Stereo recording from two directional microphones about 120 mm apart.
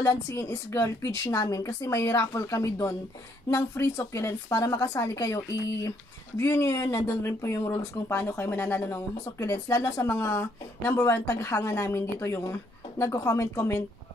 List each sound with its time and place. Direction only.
0.0 s a woman's voice: 25° left (ahead or behind)